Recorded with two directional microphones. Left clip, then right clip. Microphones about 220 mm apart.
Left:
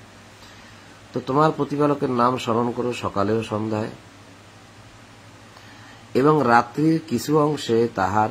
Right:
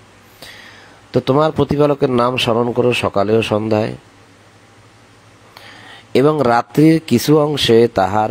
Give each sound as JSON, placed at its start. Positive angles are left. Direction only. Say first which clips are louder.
{"t": 1.1, "sound": "a man's voice", "louder": "right 6 dB", "side_deg": -35}
{"t": 6.1, "sound": "a man's voice", "louder": "right 4 dB", "side_deg": -40}